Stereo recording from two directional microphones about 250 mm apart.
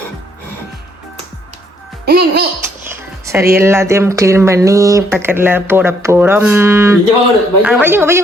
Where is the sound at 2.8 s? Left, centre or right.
Centre.